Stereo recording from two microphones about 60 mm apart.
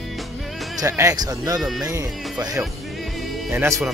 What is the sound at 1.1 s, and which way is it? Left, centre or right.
Speech, right.